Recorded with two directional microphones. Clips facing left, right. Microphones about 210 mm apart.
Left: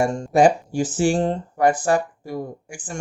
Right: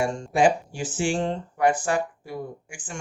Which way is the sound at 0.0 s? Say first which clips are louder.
Left 5 dB; 40° left (ahead or behind).